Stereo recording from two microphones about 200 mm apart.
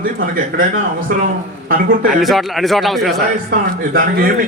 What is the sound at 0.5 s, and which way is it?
Speech, 45° right (ahead or behind).